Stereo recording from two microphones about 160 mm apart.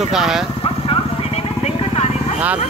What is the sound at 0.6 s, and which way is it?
Vehicle, 35° left (ahead or behind).